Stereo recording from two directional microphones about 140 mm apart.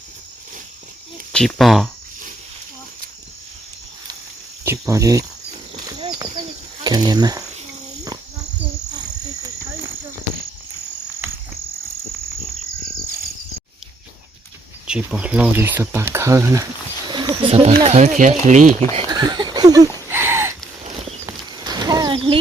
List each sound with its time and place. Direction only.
1.3 s speech: centre (ahead or behind)
4.6 s speech: 20° right (ahead or behind)
6.1 s a sound: 35° right (ahead or behind)
6.8 s cricket: 30° right (ahead or behind)
14.8 s speech: 5° right (ahead or behind)
17.1 s wild animals: 35° right (ahead or behind)
17.4 s speech: 40° right (ahead or behind); by 18.7 s 60° right (ahead or behind)
19.0 s a sound: 30° right (ahead or behind)
21.6 s a sound: 30° right (ahead or behind)
22.1 s chicken: 40° right (ahead or behind)